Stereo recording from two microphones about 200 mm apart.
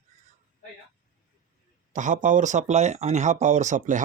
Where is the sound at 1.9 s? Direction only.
40° right (ahead or behind).